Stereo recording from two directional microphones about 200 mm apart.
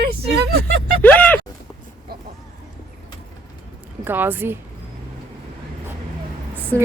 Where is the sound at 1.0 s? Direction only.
10° left (ahead or behind).